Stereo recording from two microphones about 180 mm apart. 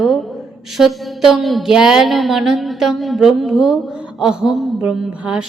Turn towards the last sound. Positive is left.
turn(degrees=-5)  # may be behind; listen again after turning